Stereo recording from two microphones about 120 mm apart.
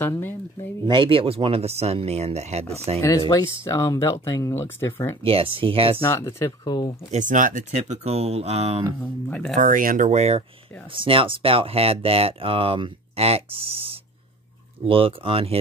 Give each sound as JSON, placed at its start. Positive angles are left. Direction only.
{"t": 0.0, "sound": "speech", "side_deg": 15}
{"t": 0.8, "sound": "speech", "side_deg": -45}
{"t": 3.0, "sound": "speech", "side_deg": 25}
{"t": 5.2, "sound": "speech", "side_deg": -50}
{"t": 6.0, "sound": "speech", "side_deg": 20}
{"t": 6.6, "sound": "speech", "side_deg": 35}
{"t": 7.1, "sound": "speech", "side_deg": -90}
{"t": 9.3, "sound": "speech", "side_deg": 5}
{"t": 9.6, "sound": "speech", "side_deg": -90}
{"t": 10.9, "sound": "speech", "side_deg": -45}